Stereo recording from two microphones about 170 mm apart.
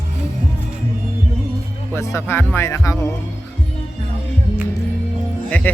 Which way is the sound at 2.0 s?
15° left (ahead or behind).